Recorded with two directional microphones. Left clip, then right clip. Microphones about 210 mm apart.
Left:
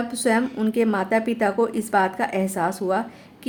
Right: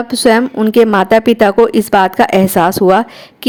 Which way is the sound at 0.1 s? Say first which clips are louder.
Right 14 dB; 40° right (ahead or behind).